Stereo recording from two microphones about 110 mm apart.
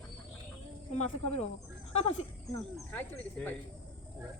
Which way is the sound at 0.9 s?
90° left.